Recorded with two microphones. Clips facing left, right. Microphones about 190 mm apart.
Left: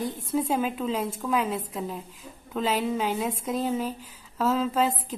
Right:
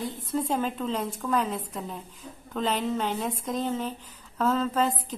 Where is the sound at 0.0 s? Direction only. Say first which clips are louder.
Left 2 dB; 10° left (ahead or behind).